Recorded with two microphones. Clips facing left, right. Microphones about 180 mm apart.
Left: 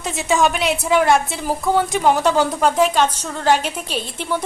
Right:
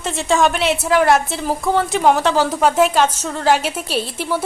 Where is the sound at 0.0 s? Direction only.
Centre (ahead or behind).